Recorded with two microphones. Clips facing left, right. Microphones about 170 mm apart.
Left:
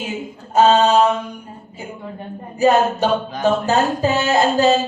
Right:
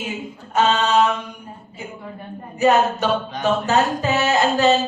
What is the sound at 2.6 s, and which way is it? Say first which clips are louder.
A man's voice: left 2 dB; 30° left (ahead or behind).